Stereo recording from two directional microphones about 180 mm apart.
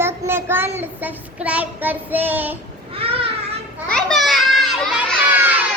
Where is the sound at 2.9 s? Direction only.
30° right (ahead or behind).